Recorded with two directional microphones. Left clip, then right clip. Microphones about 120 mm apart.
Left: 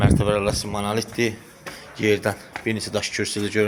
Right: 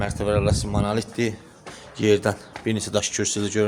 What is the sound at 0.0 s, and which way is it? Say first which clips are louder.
Speech: left 2 dB; 15° right (ahead or behind).